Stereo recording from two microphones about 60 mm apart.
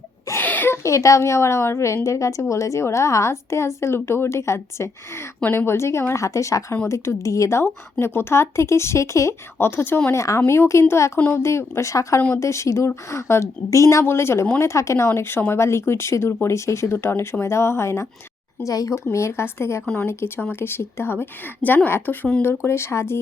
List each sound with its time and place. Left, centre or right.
0.3 s a sound: left
0.7 s speech: left
6.2 s speech: left
9.6 s a woman's voice: left
10.1 s speech: left
14.0 s speech: left
18.6 s speech: left
19.1 s a woman's voice: left